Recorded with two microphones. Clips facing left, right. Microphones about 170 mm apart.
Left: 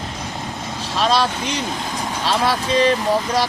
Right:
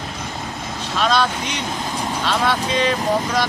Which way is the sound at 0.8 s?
30° left (ahead or behind).